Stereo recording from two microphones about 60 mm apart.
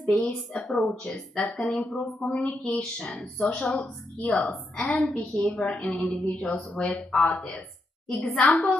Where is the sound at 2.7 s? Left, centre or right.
Centre.